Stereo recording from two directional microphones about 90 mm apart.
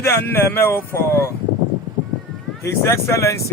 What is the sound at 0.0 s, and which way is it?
Speech, 25° left (ahead or behind).